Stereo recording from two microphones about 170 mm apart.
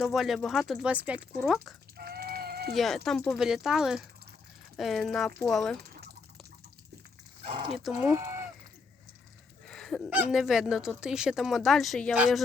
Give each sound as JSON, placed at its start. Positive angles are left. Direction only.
{"t": 0.0, "sound": "speech", "side_deg": 0}
{"t": 2.0, "sound": "a sound", "side_deg": -65}
{"t": 2.7, "sound": "speech", "side_deg": 0}
{"t": 7.4, "sound": "dog", "side_deg": -30}
{"t": 7.7, "sound": "speech", "side_deg": 0}
{"t": 8.1, "sound": "a sound", "side_deg": -15}
{"t": 9.6, "sound": "goose", "side_deg": 5}
{"t": 10.1, "sound": "speech", "side_deg": -5}